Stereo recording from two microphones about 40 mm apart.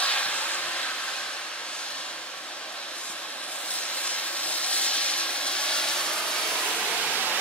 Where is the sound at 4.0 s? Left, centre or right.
Left.